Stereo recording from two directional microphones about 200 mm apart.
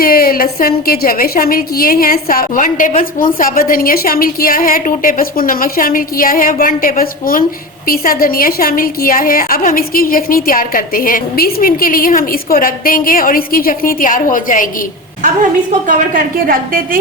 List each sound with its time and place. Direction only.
0.0 s a woman's voice: 50° left (ahead or behind)
16.1 s a woman's voice: 45° right (ahead or behind)